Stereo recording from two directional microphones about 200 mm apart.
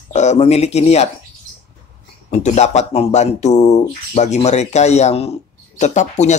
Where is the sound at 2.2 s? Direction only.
35° left (ahead or behind).